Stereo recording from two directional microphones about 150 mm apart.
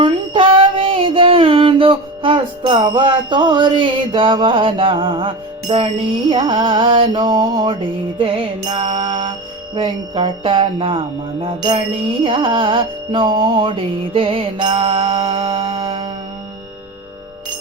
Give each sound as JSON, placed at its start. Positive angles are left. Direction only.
{"t": 0.0, "sound": "music", "side_deg": -35}